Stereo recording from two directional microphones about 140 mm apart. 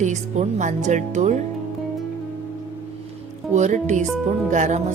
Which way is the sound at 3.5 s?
60° right (ahead or behind).